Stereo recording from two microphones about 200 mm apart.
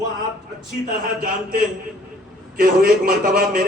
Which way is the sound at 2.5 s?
45° right (ahead or behind).